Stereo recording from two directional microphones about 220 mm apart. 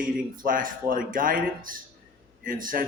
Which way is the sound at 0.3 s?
40° right (ahead or behind).